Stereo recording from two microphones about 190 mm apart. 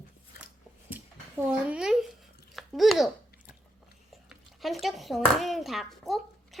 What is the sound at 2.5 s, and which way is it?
Chewing, centre (ahead or behind).